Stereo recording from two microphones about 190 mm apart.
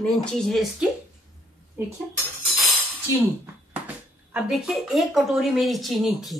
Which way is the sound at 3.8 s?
5° right (ahead or behind).